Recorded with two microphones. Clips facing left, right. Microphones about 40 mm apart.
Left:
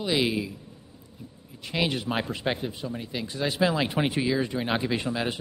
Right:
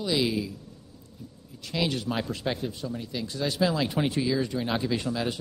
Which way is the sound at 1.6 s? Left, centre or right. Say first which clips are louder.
Left 1 dB; left.